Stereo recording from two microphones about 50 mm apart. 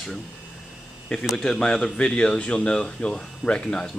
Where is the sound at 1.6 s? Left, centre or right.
Centre.